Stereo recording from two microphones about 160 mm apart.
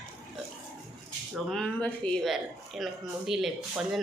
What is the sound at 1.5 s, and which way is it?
Speech, 5° left (ahead or behind).